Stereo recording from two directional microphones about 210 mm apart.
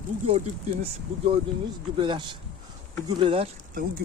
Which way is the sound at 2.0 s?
25° right (ahead or behind).